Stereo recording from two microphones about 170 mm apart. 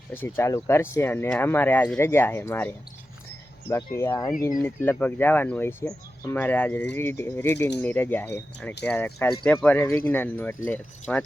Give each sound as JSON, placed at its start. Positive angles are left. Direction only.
{"t": 0.1, "sound": "speech", "side_deg": 15}